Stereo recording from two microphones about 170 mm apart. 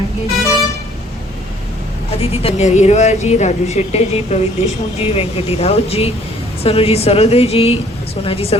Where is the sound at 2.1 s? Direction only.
35° left (ahead or behind).